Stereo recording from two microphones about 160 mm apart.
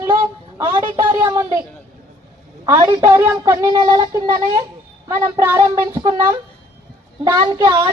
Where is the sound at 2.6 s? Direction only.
15° right (ahead or behind).